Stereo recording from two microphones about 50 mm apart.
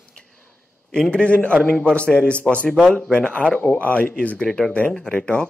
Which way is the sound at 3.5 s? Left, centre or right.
Left.